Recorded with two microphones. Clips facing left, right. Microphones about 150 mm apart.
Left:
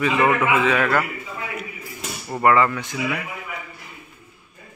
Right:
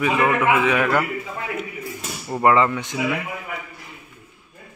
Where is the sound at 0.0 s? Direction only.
10° right (ahead or behind).